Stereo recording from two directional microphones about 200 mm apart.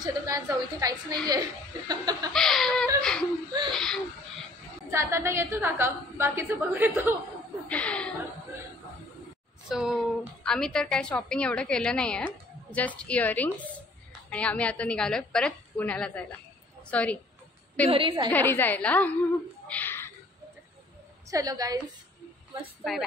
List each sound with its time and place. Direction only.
0.0 s a woman's voice: 20° right (ahead or behind)
2.3 s laughter: centre (ahead or behind)
3.0 s whimper: 5° left (ahead or behind)
3.7 s a sound: centre (ahead or behind)
4.9 s a woman's voice: 15° right (ahead or behind)
7.6 s chuckle: 5° left (ahead or behind)
9.7 s a woman's voice: centre (ahead or behind)
17.8 s a woman's voice: 25° right (ahead or behind)
18.3 s a woman's voice: 10° left (ahead or behind)
19.7 s a sound: 10° left (ahead or behind)
21.3 s a woman's voice: 15° right (ahead or behind)
22.8 s a woman's voice: centre (ahead or behind)